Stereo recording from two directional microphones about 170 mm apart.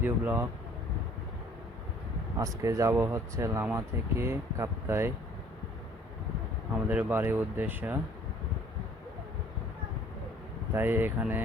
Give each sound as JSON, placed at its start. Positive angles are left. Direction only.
{"t": 0.0, "sound": "speech", "side_deg": -10}
{"t": 2.4, "sound": "speech", "side_deg": -20}
{"t": 6.7, "sound": "speech", "side_deg": -10}
{"t": 10.8, "sound": "speech", "side_deg": -10}